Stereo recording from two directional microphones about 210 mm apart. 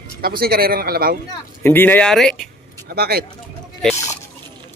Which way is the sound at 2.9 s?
50° right (ahead or behind).